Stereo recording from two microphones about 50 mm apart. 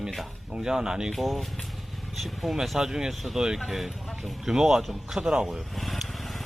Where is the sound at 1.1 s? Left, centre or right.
Centre.